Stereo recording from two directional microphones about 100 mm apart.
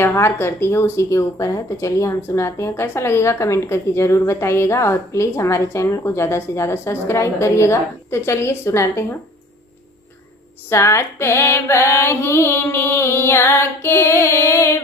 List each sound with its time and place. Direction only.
0.0 s a woman's voice: 25° left (ahead or behind)
10.7 s a woman's voice: 25° left (ahead or behind)